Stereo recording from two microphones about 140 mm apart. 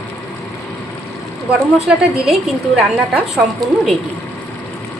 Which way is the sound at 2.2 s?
Centre (ahead or behind).